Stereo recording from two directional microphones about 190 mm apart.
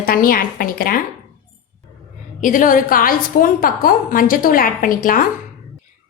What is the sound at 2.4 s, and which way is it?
A woman's voice, 45° left (ahead or behind).